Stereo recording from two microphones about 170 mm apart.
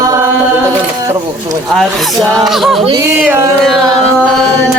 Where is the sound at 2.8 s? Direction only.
30° right (ahead or behind).